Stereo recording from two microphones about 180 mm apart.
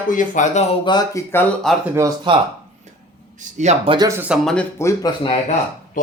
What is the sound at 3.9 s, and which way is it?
Speech, 20° right (ahead or behind).